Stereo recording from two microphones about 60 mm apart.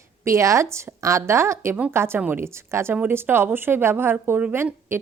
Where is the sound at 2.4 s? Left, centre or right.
Right.